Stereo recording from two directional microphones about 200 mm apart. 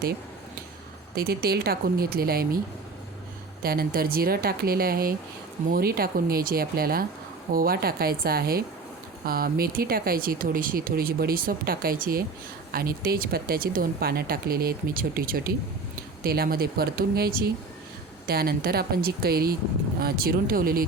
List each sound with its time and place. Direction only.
1.1 s speech: 50° right (ahead or behind)
3.6 s speech: 50° right (ahead or behind)